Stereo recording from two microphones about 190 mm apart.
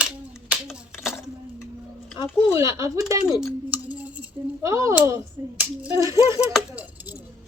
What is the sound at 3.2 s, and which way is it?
Speech, 5° right (ahead or behind).